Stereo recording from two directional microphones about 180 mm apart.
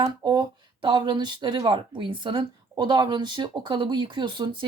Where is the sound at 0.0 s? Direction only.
20° right (ahead or behind).